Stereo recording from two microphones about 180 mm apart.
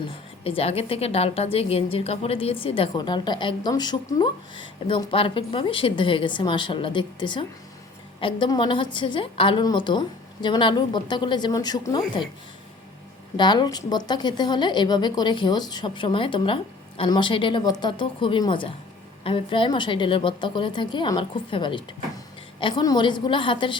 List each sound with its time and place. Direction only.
0.4 s a woman's voice: 30° left (ahead or behind)
13.3 s a woman's voice: 25° left (ahead or behind)